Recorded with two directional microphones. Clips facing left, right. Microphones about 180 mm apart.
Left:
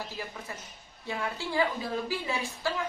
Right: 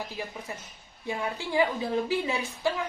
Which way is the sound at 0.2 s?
20° right (ahead or behind).